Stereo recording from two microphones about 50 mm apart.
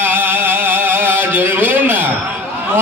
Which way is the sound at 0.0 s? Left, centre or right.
Right.